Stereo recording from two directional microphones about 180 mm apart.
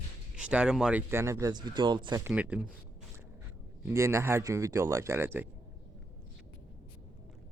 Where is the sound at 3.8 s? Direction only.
15° right (ahead or behind).